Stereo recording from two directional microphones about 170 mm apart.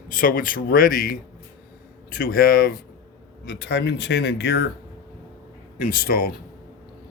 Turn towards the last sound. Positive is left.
turn(degrees=60)  # may be behind; listen again after turning